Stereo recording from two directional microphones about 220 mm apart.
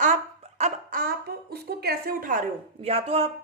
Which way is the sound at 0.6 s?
40° right (ahead or behind).